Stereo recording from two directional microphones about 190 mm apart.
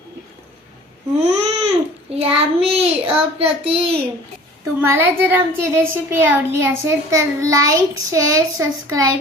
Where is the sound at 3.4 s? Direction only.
30° right (ahead or behind).